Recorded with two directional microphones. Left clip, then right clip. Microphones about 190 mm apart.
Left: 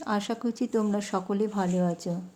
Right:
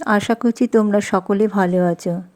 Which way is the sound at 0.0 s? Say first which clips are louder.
Right 12 dB; 40° right (ahead or behind).